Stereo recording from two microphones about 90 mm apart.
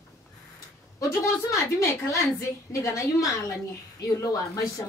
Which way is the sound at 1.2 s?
35° left (ahead or behind).